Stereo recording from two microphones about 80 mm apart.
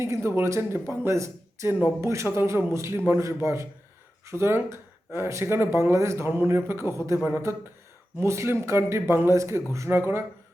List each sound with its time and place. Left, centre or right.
0.0 s speech: right